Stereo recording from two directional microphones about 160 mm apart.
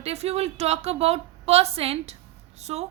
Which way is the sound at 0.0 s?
40° right (ahead or behind).